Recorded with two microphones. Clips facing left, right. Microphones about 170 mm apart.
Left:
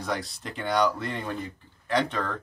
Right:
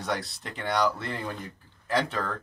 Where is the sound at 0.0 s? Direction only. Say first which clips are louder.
Even; centre (ahead or behind).